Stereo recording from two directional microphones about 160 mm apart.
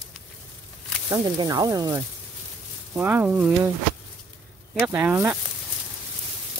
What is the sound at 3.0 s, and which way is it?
Speech, 10° right (ahead or behind).